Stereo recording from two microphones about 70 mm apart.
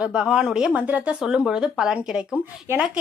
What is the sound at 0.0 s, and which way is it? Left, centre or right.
Speech, centre.